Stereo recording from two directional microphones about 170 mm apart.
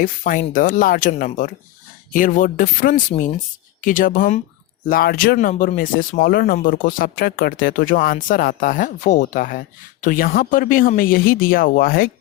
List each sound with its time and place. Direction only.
0.0 s speech: 50° left (ahead or behind)